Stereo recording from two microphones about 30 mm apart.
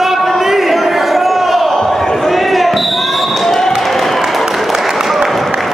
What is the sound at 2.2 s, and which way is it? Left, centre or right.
Basketball bounce, centre.